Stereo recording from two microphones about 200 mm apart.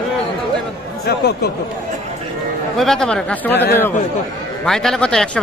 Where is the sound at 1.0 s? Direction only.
55° left (ahead or behind).